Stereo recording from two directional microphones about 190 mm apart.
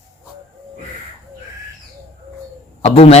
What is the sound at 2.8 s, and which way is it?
Speech, 30° left (ahead or behind).